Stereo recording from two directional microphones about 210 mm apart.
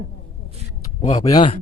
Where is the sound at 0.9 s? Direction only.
20° left (ahead or behind).